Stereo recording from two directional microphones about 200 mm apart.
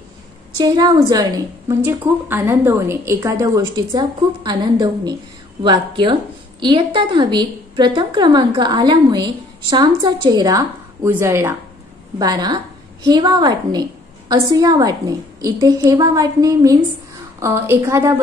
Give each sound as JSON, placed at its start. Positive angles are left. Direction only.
{"t": 0.6, "sound": "a woman's voice", "side_deg": -20}